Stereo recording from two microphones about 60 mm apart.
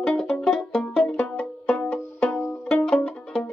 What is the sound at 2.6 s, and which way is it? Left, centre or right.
Music, centre.